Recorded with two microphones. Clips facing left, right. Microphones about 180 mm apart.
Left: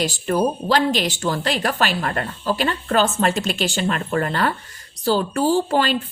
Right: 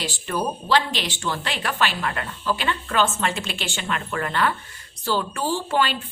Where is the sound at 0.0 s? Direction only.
40° left (ahead or behind).